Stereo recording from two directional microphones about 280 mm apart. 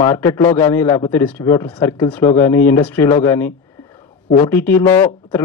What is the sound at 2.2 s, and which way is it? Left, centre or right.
Speech, left.